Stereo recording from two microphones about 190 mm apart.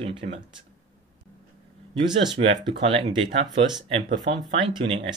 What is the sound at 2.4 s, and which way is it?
Speech, 30° right (ahead or behind).